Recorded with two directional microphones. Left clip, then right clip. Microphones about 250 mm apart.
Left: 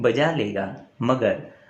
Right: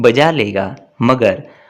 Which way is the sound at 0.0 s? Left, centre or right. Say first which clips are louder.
Right 10 dB; right.